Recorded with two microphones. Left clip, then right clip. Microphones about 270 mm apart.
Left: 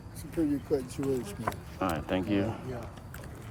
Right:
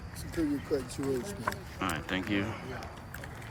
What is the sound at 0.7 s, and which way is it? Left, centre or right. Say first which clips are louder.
Speech: left 2 dB; left.